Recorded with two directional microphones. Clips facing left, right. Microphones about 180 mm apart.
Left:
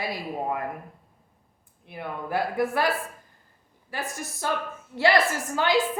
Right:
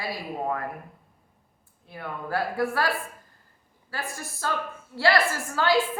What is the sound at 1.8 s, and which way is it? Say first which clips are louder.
A woman's voice: left 1 dB; 20° left (ahead or behind).